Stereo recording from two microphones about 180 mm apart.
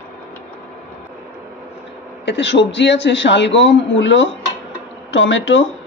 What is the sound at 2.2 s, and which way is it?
A man's voice, 80° left.